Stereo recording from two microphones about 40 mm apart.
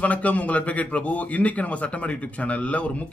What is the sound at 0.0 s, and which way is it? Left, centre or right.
A man's voice, left.